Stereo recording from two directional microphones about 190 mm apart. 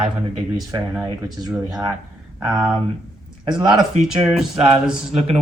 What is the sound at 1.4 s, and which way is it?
Speech, 20° right (ahead or behind).